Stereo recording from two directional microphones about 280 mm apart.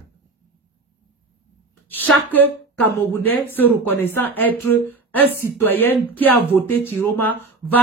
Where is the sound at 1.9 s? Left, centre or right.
Centre.